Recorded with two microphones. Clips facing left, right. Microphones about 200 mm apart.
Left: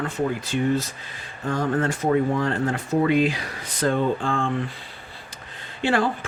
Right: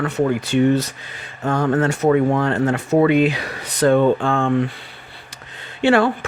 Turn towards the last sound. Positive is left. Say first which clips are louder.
# right 7 dB
turn(degrees=-70)  # may be behind; listen again after turning